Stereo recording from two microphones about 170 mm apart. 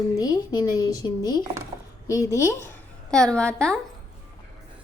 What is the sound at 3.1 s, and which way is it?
Speech, 5° left (ahead or behind).